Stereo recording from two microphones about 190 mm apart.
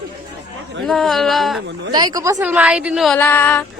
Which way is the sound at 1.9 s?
20° right (ahead or behind).